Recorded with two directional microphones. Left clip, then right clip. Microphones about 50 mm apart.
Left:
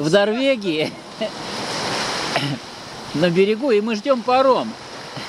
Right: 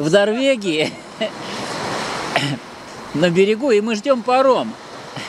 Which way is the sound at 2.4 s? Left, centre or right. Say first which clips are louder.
Right 3 dB; centre.